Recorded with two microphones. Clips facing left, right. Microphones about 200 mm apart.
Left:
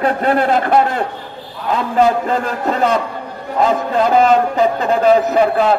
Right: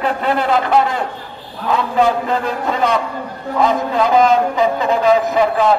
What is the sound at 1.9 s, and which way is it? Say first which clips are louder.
A man's voice: left 3 dB; 45° left (ahead or behind).